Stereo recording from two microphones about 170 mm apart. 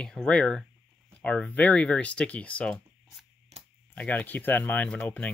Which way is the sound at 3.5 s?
40° right (ahead or behind).